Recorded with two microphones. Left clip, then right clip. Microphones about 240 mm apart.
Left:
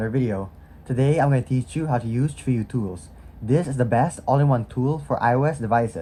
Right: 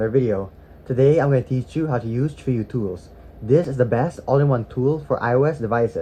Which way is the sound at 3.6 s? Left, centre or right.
Left.